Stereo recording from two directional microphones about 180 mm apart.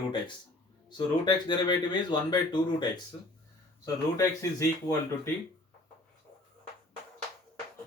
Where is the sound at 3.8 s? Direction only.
20° left (ahead or behind).